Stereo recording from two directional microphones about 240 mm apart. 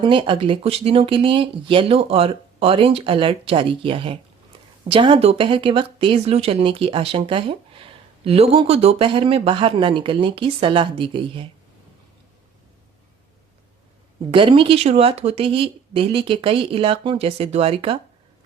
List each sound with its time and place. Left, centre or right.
0.0 s speech: right
14.3 s speech: right